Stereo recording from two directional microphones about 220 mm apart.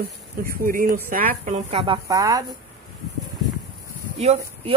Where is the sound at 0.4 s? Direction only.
40° right (ahead or behind); by 2.4 s 15° right (ahead or behind).